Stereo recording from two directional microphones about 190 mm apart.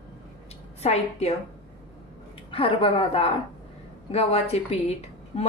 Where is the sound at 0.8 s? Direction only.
35° left (ahead or behind).